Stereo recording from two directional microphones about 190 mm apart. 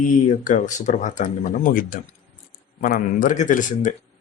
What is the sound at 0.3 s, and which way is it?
Speech, 40° left (ahead or behind).